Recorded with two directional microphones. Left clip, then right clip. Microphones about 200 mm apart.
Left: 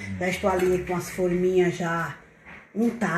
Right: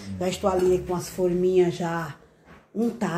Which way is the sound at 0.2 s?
20° right (ahead or behind).